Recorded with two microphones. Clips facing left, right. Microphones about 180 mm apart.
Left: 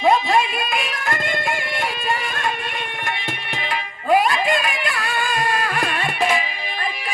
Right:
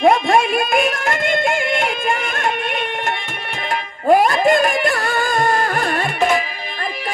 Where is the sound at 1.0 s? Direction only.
80° right.